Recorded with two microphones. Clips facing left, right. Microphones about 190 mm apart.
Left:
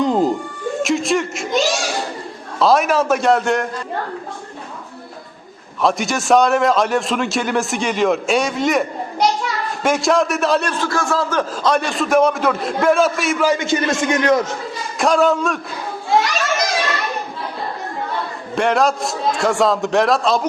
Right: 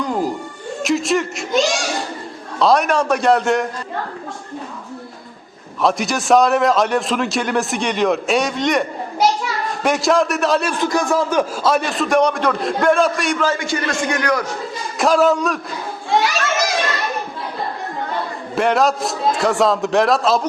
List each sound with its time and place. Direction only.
0.0 s music: 20° left (ahead or behind)
0.8 s a man's voice: centre (ahead or behind)
2.6 s a man's voice: centre (ahead or behind)
5.8 s a man's voice: centre (ahead or behind)
10.8 s a man's voice: 15° right (ahead or behind); by 13.5 s centre (ahead or behind)
13.5 s a man's voice: 20° left (ahead or behind)
14.9 s a man's voice: centre (ahead or behind)
16.0 s children playing: centre (ahead or behind)
18.5 s a man's voice: centre (ahead or behind)